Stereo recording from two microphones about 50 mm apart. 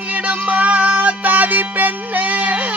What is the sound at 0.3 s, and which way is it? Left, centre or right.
Music, right.